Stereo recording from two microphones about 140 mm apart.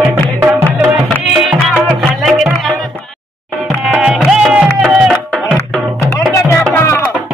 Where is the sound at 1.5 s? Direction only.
5° right (ahead or behind).